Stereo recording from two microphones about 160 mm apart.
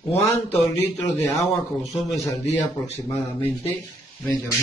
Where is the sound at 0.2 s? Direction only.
15° left (ahead or behind).